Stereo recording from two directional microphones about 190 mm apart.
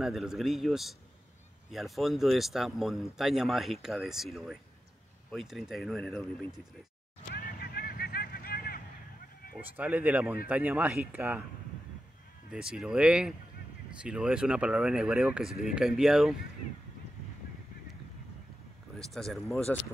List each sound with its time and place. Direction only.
0.0 s speech: centre (ahead or behind)
7.3 s a sound: 55° left (ahead or behind)
9.6 s speech: 10° right (ahead or behind)
12.4 s speech: 5° right (ahead or behind)
18.9 s speech: centre (ahead or behind)